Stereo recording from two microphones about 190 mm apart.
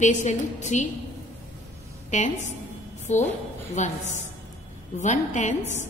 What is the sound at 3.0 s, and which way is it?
Speech, 40° left (ahead or behind).